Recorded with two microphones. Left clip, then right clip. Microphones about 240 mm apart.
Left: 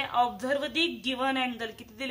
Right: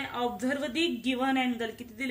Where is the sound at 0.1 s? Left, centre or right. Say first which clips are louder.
Left 5 dB; centre.